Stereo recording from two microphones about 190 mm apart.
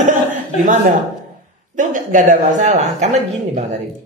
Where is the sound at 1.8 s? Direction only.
40° right (ahead or behind).